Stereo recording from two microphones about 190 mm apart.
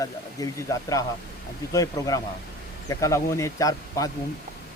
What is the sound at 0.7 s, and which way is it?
Speech, 20° left (ahead or behind).